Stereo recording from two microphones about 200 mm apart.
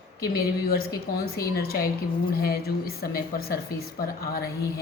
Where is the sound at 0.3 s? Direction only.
50° left (ahead or behind).